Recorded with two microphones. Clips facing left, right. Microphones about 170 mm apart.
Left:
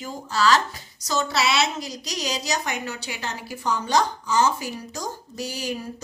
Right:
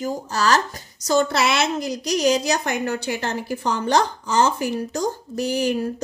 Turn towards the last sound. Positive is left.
turn(degrees=-55)  # may be behind; listen again after turning